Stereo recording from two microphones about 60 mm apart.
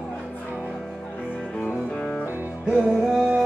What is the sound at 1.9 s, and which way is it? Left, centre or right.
Music, centre.